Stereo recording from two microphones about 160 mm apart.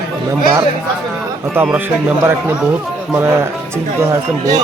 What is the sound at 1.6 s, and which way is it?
A man's voice, 10° right (ahead or behind).